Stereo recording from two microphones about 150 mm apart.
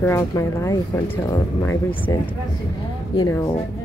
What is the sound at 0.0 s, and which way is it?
A woman's voice, 15° left (ahead or behind).